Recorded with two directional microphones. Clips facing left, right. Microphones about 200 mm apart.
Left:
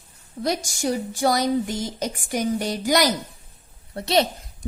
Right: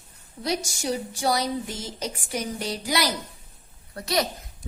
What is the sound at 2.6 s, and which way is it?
Speech, 45° left (ahead or behind).